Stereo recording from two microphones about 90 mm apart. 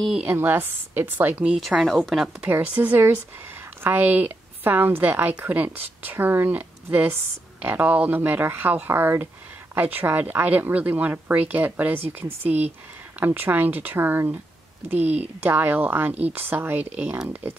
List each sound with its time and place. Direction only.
0.2 s a woman's voice: 20° right (ahead or behind)
1.9 s speech: 5° left (ahead or behind)
2.5 s a woman's voice: 15° right (ahead or behind)